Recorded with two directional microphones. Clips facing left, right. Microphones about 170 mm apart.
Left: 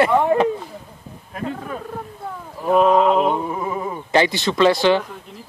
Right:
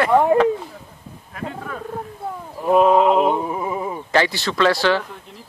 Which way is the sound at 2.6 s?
10° right (ahead or behind).